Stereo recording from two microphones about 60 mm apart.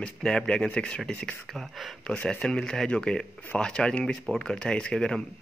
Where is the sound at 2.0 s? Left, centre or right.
Centre.